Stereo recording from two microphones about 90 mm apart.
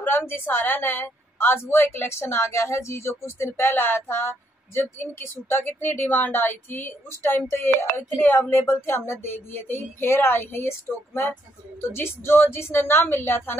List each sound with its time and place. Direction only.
0.0 s a woman's voice: 25° left (ahead or behind)
11.8 s a woman's voice: 25° left (ahead or behind)